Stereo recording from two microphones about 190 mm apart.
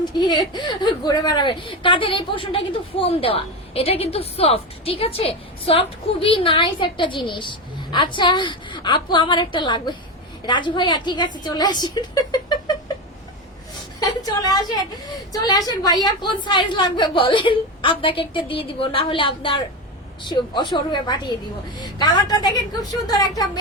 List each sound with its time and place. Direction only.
0.2 s a woman's voice: 25° left (ahead or behind)
14.0 s a woman's voice: 20° left (ahead or behind)